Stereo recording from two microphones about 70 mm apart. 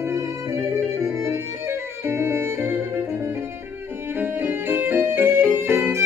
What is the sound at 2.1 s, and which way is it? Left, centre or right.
Violin, right.